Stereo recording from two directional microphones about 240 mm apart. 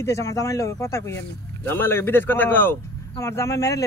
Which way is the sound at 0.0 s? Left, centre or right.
Centre.